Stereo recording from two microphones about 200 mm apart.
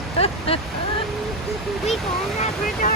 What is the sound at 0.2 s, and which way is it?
Speech, 30° left (ahead or behind).